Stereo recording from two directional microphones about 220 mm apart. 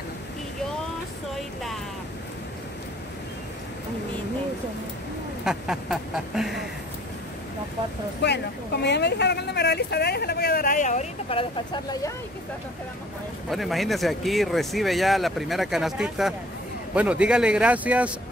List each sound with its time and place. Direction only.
1.3 s music: centre (ahead or behind)
5.4 s a sound: centre (ahead or behind)
8.2 s speech: 50° left (ahead or behind); by 12.1 s 20° left (ahead or behind)
13.5 s speech: centre (ahead or behind)